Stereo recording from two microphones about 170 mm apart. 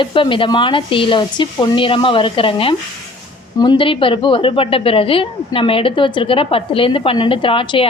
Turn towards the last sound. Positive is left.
turn(degrees=30)  # may be behind; listen again after turning